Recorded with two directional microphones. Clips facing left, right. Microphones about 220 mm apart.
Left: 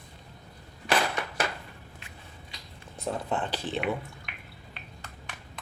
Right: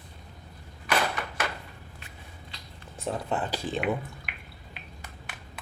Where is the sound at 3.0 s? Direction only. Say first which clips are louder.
Right 1 dB; 5° right (ahead or behind).